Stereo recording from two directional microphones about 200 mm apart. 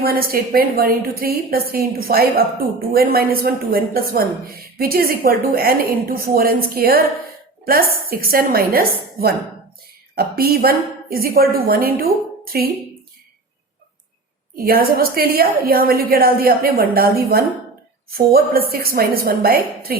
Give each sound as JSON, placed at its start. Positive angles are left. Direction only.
{"t": 0.0, "sound": "a woman's voice", "side_deg": -50}
{"t": 14.5, "sound": "a woman's voice", "side_deg": -50}